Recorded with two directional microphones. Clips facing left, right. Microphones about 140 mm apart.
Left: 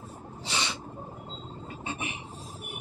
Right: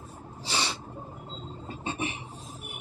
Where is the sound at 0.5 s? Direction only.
35° right (ahead or behind).